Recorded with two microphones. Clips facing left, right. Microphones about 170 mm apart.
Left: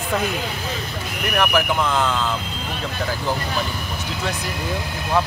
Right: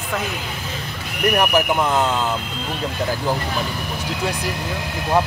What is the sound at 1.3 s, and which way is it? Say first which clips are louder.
Speech: even; 20° right (ahead or behind).